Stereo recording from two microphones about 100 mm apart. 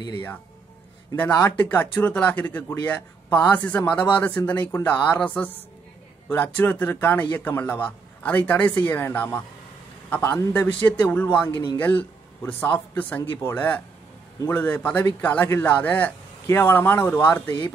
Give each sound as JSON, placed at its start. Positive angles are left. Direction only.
{"t": 1.3, "sound": "a man's voice", "side_deg": 20}